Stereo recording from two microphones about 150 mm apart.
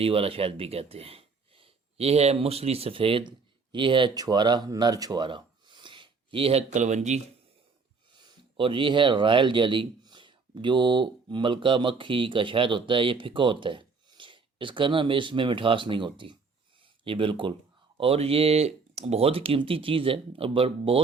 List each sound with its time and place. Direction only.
0.0 s speech: 40° right (ahead or behind)
8.5 s speech: 35° right (ahead or behind)